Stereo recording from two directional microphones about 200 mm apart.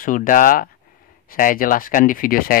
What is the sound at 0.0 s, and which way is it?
Speech, 45° left (ahead or behind).